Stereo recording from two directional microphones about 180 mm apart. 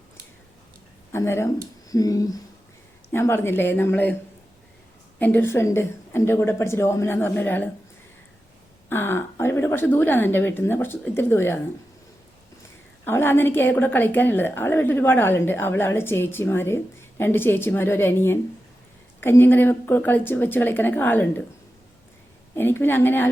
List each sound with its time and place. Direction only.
1.1 s a woman's voice: 15° left (ahead or behind)
5.2 s a woman's voice: 10° left (ahead or behind)
8.9 s a woman's voice: 10° left (ahead or behind)
13.1 s a woman's voice: 15° left (ahead or behind)
22.5 s a woman's voice: 10° left (ahead or behind)